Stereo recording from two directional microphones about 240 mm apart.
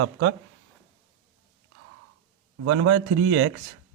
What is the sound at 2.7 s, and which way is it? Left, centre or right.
Speech, right.